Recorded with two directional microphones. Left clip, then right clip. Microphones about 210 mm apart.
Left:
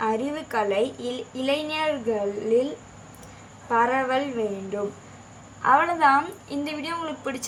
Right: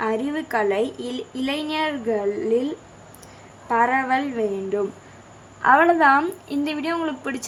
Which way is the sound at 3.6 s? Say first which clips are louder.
Right 2 dB; 30° right (ahead or behind).